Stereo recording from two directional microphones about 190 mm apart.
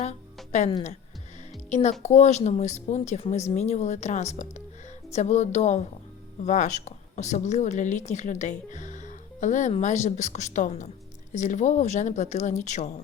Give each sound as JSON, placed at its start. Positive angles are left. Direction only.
{"t": 0.5, "sound": "a woman's voice", "side_deg": 35}
{"t": 1.7, "sound": "a woman's voice", "side_deg": 35}